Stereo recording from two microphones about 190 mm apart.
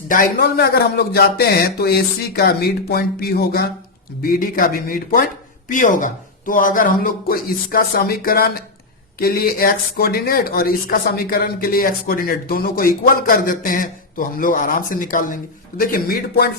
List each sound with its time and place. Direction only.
0.1 s speech: 50° left (ahead or behind)